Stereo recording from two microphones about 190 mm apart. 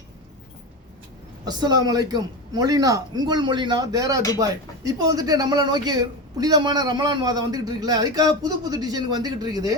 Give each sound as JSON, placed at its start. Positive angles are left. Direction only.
{"t": 1.5, "sound": "speech", "side_deg": -20}